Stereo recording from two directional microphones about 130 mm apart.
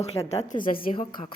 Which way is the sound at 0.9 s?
45° left (ahead or behind).